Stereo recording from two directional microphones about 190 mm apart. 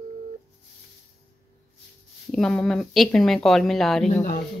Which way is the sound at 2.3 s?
5° left (ahead or behind).